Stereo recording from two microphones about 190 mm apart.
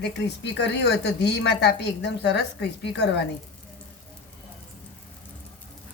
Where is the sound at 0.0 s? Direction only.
65° left (ahead or behind).